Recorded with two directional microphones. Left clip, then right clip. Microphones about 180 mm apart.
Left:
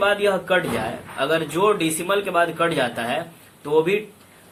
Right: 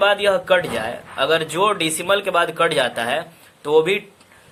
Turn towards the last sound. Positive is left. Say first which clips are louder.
# right 3 dB
turn(degrees=-55)  # may be behind; listen again after turning